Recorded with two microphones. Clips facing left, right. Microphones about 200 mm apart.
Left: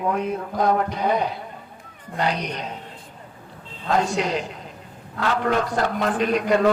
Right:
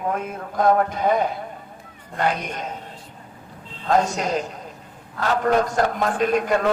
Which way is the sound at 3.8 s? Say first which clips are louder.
Right 1 dB; 45° right (ahead or behind).